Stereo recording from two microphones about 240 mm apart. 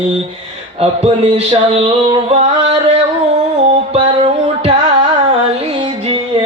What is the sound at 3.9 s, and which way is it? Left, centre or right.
Music, right.